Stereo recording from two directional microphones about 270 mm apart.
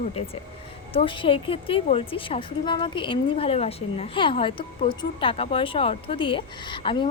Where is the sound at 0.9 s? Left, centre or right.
Centre.